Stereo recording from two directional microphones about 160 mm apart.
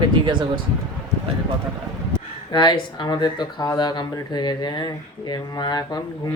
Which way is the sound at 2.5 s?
25° left (ahead or behind).